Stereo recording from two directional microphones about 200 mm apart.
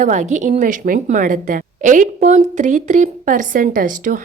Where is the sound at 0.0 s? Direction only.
40° right (ahead or behind).